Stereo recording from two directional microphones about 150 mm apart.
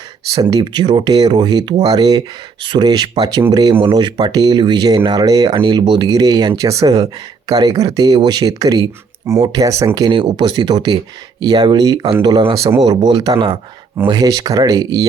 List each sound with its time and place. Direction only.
0.5 s speech: 30° right (ahead or behind)